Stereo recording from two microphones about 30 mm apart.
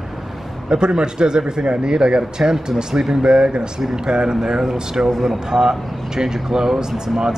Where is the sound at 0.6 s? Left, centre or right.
Right.